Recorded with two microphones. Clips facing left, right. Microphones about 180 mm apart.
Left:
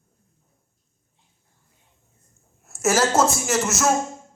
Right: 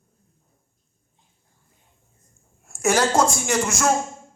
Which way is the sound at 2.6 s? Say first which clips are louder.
Even; centre (ahead or behind).